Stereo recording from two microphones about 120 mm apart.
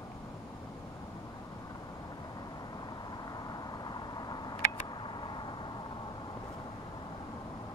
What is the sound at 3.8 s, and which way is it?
Vehicle, 35° left (ahead or behind).